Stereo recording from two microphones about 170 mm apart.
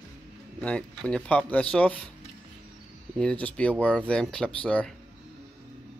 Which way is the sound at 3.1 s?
5° left (ahead or behind).